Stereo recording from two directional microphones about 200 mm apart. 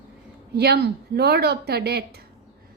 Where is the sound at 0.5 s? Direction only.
55° right (ahead or behind).